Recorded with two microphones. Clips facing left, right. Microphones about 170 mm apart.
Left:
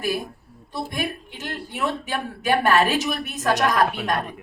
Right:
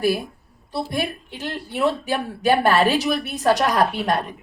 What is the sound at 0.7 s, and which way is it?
A woman's voice, 35° right (ahead or behind).